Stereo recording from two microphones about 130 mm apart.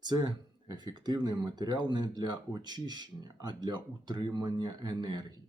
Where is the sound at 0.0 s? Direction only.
35° right (ahead or behind).